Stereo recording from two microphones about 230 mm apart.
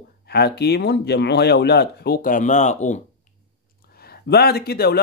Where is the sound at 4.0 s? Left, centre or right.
Left.